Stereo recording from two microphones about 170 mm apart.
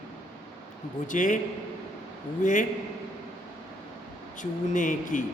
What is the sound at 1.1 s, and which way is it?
Speech, 50° left (ahead or behind).